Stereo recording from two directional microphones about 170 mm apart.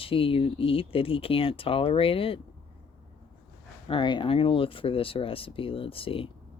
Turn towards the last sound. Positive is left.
turn(degrees=30)  # may be behind; listen again after turning